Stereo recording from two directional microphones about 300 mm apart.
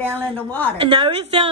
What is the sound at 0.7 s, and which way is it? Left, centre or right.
Speech, centre.